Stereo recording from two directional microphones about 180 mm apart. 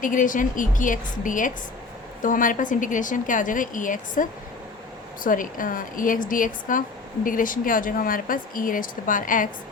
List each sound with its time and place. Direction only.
0.0 s speech: 45° left (ahead or behind)